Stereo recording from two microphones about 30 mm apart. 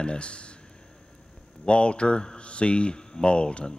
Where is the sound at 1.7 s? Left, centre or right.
Left.